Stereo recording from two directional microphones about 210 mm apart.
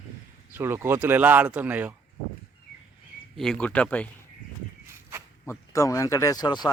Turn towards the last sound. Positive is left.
turn(degrees=20)  # may be behind; listen again after turning